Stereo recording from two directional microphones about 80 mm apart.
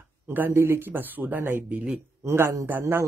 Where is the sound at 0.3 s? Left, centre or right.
Right.